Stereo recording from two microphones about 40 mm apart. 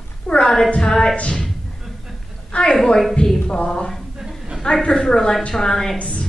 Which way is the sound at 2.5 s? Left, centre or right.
Left.